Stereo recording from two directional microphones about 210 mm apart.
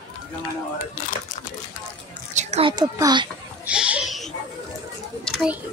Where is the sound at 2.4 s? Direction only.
30° right (ahead or behind).